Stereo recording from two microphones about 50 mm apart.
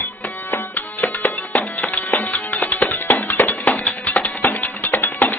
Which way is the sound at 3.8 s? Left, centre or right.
Left.